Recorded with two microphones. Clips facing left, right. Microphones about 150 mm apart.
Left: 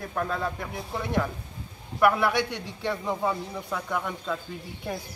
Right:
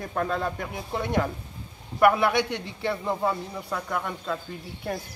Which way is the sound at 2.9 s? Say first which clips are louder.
Right 1 dB; centre (ahead or behind).